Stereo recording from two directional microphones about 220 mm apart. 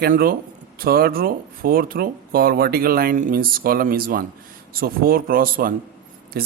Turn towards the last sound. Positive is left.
turn(degrees=-45)  # may be behind; listen again after turning